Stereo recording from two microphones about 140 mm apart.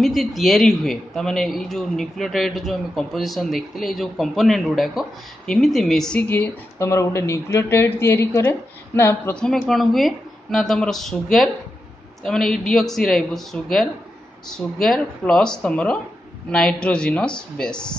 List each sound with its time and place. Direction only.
0.0 s speech: centre (ahead or behind); by 9.4 s 15° left (ahead or behind)
9.4 s speech: 5° left (ahead or behind)